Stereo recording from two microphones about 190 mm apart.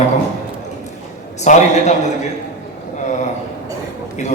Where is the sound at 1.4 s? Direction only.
40° left (ahead or behind).